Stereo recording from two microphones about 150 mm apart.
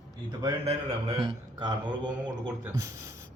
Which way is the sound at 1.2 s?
30° right (ahead or behind).